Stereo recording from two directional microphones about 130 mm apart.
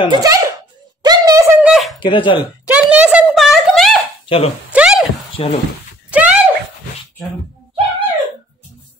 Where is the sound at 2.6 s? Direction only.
10° right (ahead or behind).